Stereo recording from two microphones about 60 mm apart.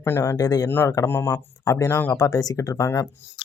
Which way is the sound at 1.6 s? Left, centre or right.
Left.